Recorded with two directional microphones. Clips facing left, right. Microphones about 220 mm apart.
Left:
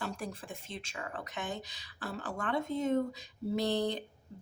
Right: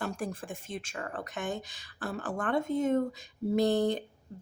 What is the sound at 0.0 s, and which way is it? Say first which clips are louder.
Speech: right 4 dB; 50° right (ahead or behind).